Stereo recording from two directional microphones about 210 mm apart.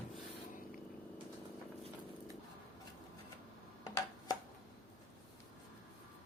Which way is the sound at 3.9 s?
15° left (ahead or behind).